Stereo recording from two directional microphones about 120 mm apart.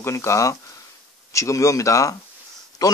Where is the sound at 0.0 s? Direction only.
25° left (ahead or behind).